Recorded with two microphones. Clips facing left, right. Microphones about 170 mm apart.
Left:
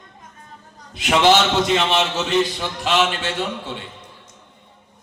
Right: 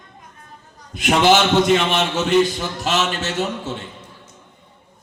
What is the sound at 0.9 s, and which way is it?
A man's voice, 50° right (ahead or behind).